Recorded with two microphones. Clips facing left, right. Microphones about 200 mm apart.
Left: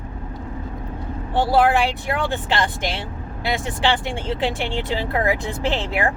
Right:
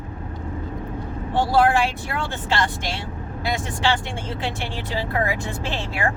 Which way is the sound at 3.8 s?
15° left (ahead or behind).